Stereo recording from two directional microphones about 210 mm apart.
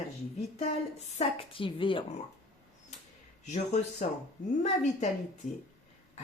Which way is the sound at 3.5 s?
35° left (ahead or behind).